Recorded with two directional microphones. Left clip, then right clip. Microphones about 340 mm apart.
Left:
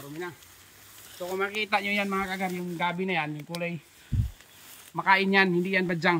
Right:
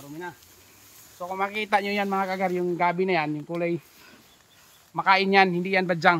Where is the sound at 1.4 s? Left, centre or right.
Centre.